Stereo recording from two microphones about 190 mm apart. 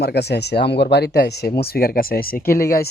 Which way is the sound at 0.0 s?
60° left (ahead or behind).